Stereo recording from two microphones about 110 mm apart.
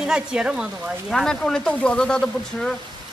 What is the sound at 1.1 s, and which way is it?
Speech, 5° left (ahead or behind).